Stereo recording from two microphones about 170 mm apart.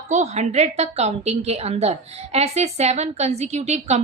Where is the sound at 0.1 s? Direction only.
40° right (ahead or behind).